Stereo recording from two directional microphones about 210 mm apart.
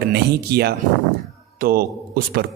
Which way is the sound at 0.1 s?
50° right (ahead or behind).